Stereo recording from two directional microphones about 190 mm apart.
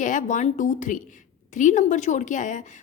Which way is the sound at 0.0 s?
40° left (ahead or behind).